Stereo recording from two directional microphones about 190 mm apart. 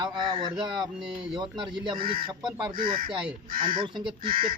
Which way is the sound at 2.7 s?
50° right (ahead or behind).